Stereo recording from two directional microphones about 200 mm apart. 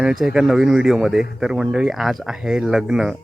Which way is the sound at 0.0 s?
5° right (ahead or behind).